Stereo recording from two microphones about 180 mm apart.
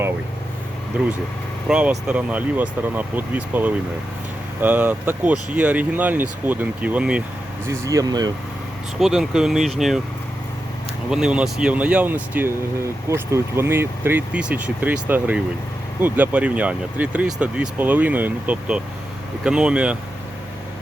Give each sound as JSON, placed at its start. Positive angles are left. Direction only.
{"t": 1.6, "sound": "speech", "side_deg": -5}
{"t": 7.7, "sound": "speech", "side_deg": -20}
{"t": 9.0, "sound": "speech", "side_deg": 0}
{"t": 11.1, "sound": "speech", "side_deg": -5}